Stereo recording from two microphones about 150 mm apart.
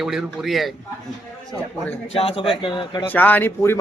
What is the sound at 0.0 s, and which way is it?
Speech, centre (ahead or behind).